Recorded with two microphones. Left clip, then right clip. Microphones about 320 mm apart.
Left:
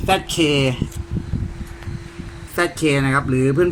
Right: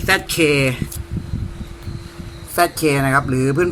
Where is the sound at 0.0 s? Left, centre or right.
Centre.